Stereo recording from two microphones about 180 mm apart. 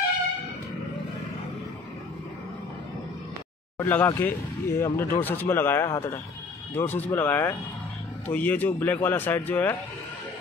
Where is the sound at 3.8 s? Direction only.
10° left (ahead or behind).